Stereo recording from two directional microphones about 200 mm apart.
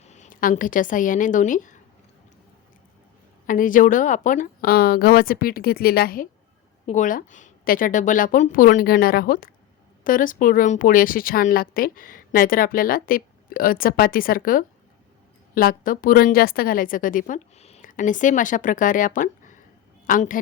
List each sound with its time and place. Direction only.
0.0 s a woman's voice: 35° left (ahead or behind)
3.4 s a woman's voice: 40° left (ahead or behind)